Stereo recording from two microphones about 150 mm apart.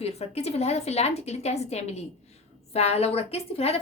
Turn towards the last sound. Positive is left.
turn(degrees=40)  # may be behind; listen again after turning